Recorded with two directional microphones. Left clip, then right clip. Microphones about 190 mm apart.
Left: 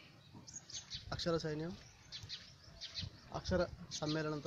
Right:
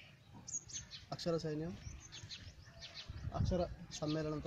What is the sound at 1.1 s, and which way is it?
Speech, centre (ahead or behind).